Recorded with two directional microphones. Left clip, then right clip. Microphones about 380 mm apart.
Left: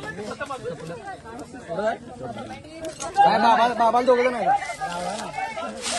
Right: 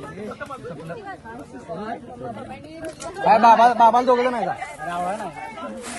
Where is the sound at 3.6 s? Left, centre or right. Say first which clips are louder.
Right 5 dB; right.